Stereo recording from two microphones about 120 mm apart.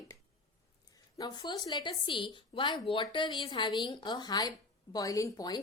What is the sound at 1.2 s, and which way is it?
A woman's voice, 35° left (ahead or behind).